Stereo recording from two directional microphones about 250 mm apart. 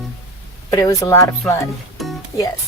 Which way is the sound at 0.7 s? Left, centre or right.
Centre.